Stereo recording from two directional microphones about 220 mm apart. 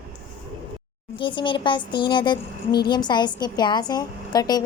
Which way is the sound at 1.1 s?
20° left (ahead or behind).